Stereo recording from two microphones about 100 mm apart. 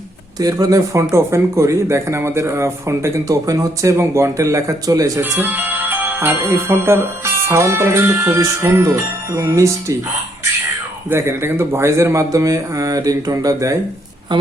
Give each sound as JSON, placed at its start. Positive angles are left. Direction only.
{"t": 0.3, "sound": "speech", "side_deg": -40}
{"t": 5.2, "sound": "speech", "side_deg": -20}
{"t": 11.1, "sound": "speech", "side_deg": -25}